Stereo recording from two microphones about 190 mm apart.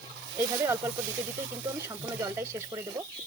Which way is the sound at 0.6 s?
15° right (ahead or behind).